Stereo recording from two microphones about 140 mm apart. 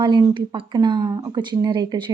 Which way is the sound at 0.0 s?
30° right (ahead or behind).